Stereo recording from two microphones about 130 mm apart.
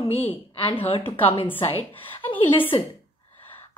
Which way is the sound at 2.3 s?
40° left (ahead or behind).